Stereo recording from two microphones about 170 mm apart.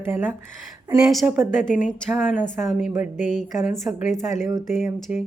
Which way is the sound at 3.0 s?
45° left (ahead or behind).